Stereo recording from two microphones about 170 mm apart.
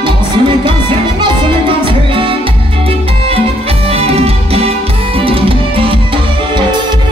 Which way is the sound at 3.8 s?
35° right (ahead or behind).